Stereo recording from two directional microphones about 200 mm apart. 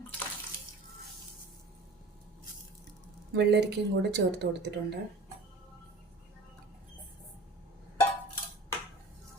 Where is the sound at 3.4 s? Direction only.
55° right (ahead or behind).